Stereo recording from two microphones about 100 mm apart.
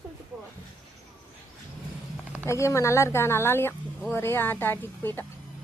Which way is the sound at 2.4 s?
30° left (ahead or behind).